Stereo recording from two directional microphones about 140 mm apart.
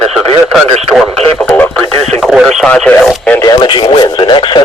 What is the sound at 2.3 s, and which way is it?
Radio, 5° right (ahead or behind).